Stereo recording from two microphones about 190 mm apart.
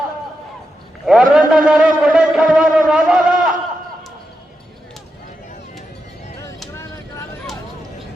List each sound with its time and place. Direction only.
1.0 s a man's voice: 5° right (ahead or behind)
6.7 s vehicle: 15° left (ahead or behind)